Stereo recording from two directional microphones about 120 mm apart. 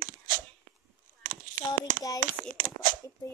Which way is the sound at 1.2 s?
90° right.